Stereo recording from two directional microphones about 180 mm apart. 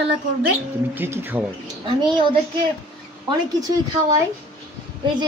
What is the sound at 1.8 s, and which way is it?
Speech, 25° right (ahead or behind).